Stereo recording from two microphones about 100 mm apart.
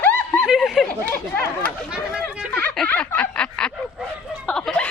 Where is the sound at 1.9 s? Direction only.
10° right (ahead or behind).